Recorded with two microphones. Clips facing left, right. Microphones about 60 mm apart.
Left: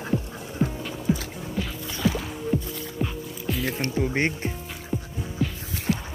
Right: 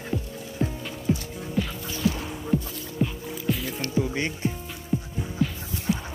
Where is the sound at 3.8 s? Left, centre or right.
Left.